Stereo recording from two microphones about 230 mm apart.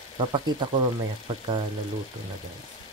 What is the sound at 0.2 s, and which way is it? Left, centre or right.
Speech, centre.